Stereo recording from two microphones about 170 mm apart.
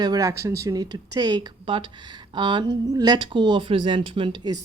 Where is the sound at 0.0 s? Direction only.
20° right (ahead or behind).